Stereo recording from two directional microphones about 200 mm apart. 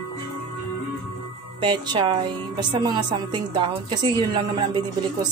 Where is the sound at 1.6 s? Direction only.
20° right (ahead or behind).